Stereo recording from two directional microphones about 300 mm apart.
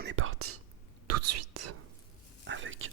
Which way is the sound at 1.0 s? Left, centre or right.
Right.